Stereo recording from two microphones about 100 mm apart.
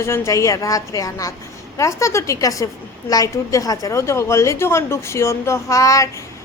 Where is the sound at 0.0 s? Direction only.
25° left (ahead or behind).